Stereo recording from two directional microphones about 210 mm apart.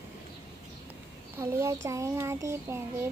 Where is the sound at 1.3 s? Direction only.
15° right (ahead or behind).